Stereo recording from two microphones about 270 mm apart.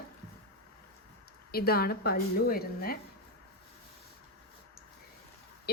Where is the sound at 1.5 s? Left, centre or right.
Left.